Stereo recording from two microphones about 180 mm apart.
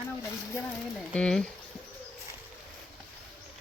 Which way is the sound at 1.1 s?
5° left (ahead or behind).